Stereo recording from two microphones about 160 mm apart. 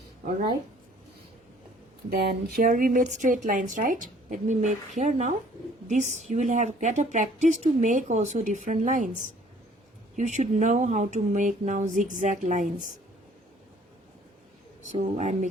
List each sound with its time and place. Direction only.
2.0 s speech: 75° right (ahead or behind); by 9.0 s 55° right (ahead or behind)
10.2 s speech: 50° right (ahead or behind)
14.8 s speech: 45° right (ahead or behind)